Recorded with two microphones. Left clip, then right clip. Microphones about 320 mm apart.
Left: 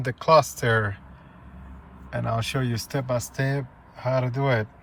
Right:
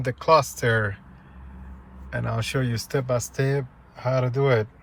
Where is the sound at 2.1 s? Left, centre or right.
Centre.